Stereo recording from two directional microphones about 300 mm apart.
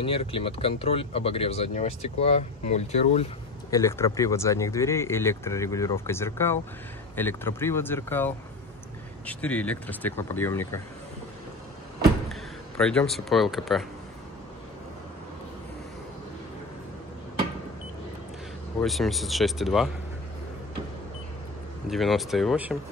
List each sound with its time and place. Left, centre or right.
0.0 s speech: centre
3.7 s speech: centre
12.3 s speech: centre
18.8 s speech: centre
21.8 s speech: centre